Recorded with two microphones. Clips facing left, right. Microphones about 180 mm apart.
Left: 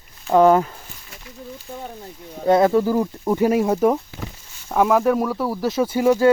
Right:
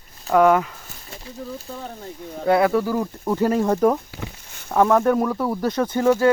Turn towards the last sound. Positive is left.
turn(degrees=15)  # may be behind; listen again after turning